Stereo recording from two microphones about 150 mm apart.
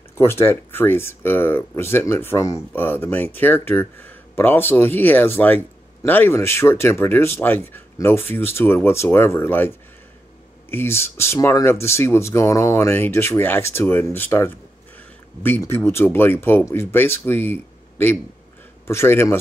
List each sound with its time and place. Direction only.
0.1 s speech: 15° left (ahead or behind)